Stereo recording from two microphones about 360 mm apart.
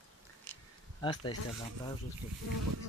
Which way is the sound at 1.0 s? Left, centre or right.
Centre.